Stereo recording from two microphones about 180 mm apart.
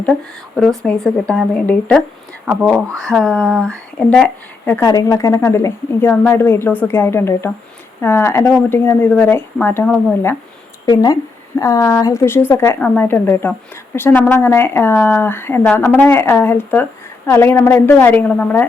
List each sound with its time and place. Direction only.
0.0 s speech: centre (ahead or behind)
10.8 s speech: 20° left (ahead or behind)